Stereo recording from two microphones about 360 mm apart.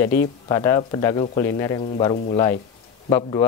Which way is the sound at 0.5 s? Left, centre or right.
Centre.